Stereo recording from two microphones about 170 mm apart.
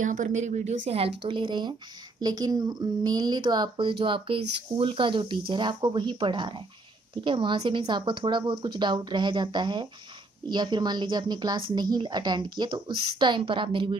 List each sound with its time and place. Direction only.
0.0 s speech: 45° right (ahead or behind); by 13.9 s 30° right (ahead or behind)